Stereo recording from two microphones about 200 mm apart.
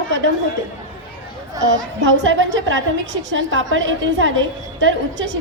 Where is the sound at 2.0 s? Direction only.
70° right (ahead or behind).